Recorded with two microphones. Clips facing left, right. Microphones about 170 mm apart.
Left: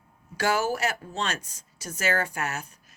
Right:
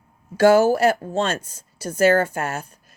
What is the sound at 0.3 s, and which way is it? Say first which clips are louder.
A woman's voice: right 11 dB; 55° right (ahead or behind).